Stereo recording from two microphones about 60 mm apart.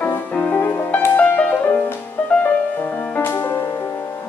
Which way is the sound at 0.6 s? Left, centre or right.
Left.